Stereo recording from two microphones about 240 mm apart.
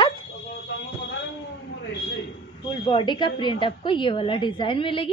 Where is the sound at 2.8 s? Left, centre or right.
Centre.